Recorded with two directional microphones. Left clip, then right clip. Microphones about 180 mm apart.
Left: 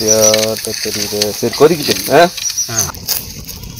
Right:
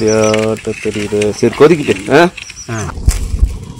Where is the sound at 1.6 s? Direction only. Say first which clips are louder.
Right 1 dB; 15° right (ahead or behind).